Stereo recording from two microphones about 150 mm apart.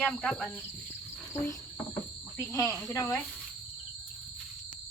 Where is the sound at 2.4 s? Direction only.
20° left (ahead or behind).